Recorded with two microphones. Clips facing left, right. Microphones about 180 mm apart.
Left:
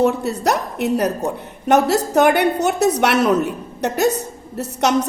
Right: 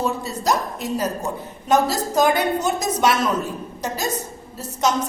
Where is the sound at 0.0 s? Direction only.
65° left (ahead or behind).